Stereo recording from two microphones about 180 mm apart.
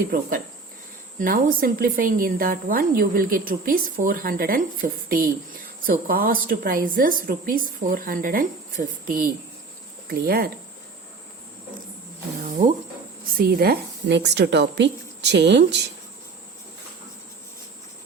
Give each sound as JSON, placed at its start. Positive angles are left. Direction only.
{"t": 0.1, "sound": "a woman's voice", "side_deg": -50}
{"t": 12.4, "sound": "a sound", "side_deg": -45}
{"t": 13.4, "sound": "a woman's voice", "side_deg": -60}